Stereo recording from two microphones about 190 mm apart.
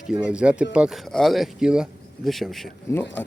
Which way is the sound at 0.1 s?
5° right (ahead or behind).